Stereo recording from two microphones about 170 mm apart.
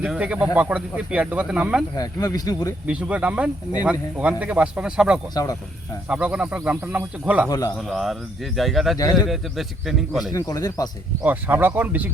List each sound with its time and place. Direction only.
0.0 s speech: 5° right (ahead or behind)
2.0 s speech: 20° left (ahead or behind)
2.8 s speech: 10° right (ahead or behind)
5.3 s speech: 20° left (ahead or behind)
6.1 s speech: 5° right (ahead or behind)
9.0 s speech: 20° left (ahead or behind)
9.3 s speech: centre (ahead or behind)
10.3 s speech: 20° left (ahead or behind)
11.2 s speech: 10° right (ahead or behind)